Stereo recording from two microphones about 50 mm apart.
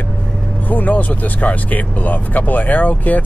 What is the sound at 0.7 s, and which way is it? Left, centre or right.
Speech, left.